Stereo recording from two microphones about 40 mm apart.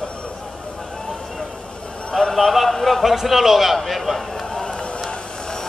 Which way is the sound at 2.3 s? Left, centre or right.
Centre.